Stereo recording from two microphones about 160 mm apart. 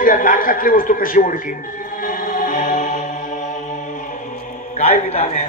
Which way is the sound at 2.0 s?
55° left (ahead or behind).